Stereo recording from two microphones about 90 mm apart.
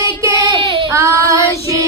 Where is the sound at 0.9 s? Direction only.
35° right (ahead or behind).